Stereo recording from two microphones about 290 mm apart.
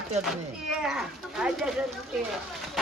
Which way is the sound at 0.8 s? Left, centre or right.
Centre.